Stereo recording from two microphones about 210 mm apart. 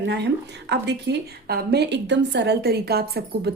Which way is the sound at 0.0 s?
55° right (ahead or behind).